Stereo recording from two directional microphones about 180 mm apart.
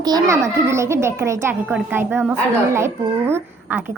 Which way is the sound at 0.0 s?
20° right (ahead or behind).